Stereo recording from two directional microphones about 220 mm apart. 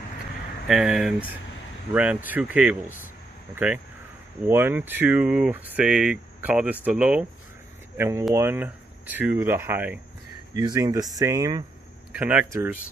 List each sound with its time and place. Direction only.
0.7 s speech: 5° right (ahead or behind)